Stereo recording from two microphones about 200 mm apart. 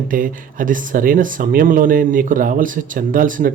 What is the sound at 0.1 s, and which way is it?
Speech, 40° right (ahead or behind).